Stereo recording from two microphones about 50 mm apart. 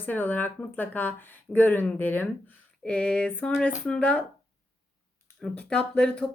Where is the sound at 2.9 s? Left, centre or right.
Centre.